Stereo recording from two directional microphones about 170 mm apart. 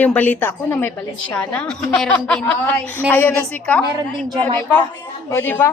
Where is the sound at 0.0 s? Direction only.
10° left (ahead or behind).